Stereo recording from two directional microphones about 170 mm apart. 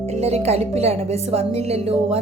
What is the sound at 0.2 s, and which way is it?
A woman's voice, 40° right (ahead or behind).